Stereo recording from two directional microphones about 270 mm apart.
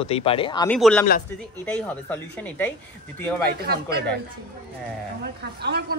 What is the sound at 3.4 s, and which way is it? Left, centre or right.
Speech, right.